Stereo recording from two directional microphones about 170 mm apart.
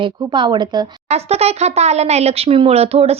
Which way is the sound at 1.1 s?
40° right (ahead or behind).